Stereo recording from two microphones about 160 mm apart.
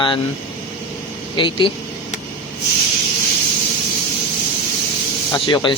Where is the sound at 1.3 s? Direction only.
30° left (ahead or behind).